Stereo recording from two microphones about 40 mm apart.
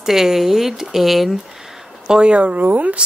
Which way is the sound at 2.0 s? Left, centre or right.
Right.